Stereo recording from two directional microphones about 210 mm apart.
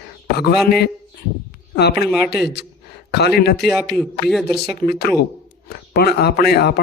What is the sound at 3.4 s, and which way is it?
Speech, 50° left (ahead or behind).